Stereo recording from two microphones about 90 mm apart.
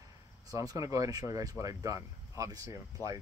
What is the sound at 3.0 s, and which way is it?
Speech, 30° left (ahead or behind).